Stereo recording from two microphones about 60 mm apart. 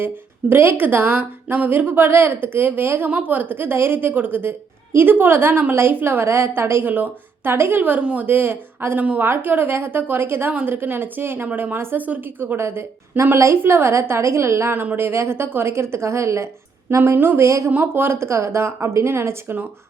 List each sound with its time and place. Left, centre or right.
0.0 s a woman's voice: right
9.0 s a woman's voice: right
9.2 s a woman's voice: right
17.0 s a woman's voice: right
17.4 s speech: right
17.7 s speech: right